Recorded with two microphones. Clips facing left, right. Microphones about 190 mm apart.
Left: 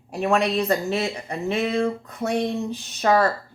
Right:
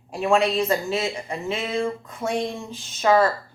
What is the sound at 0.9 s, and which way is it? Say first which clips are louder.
Speech: even; 40° left (ahead or behind).